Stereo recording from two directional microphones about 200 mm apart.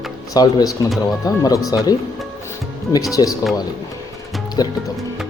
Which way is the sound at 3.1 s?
15° left (ahead or behind).